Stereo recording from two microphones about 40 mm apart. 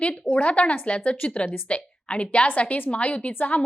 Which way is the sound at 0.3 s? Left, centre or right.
Left.